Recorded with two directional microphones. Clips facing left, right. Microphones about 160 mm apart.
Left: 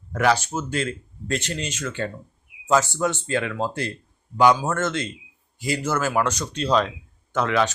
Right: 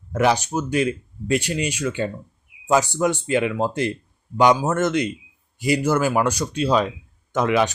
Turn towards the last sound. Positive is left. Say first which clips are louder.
# right 2 dB
turn(degrees=-15)  # may be behind; listen again after turning